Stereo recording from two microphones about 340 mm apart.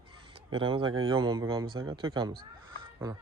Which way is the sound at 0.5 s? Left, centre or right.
Centre.